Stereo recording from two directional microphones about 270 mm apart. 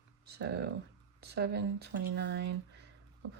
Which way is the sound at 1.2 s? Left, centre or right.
Right.